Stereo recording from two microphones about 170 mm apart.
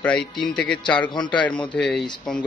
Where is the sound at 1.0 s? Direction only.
25° left (ahead or behind).